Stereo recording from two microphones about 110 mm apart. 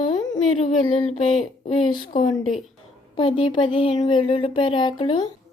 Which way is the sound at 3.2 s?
50° left (ahead or behind).